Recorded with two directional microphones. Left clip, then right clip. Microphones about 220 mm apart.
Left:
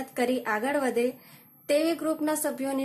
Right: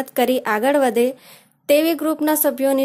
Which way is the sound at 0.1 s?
40° right (ahead or behind).